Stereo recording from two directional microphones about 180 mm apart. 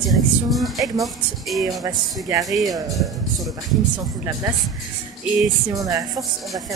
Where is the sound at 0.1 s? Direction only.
Centre (ahead or behind).